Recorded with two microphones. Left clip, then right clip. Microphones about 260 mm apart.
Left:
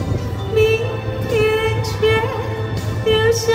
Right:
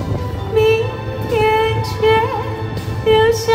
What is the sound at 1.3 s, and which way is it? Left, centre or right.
Music, right.